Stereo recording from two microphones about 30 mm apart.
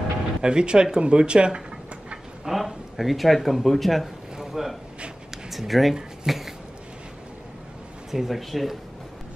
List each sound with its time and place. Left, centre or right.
0.4 s speech: right
2.4 s speech: centre
4.4 s a sound: centre
5.5 s speech: centre
6.2 s a sound: centre
8.1 s speech: centre